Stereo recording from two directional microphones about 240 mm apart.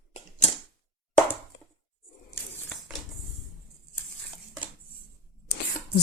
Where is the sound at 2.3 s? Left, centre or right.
Centre.